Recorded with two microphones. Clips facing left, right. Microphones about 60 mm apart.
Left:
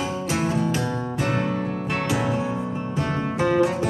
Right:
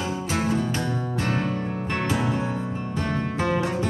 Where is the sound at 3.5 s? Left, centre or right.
Centre.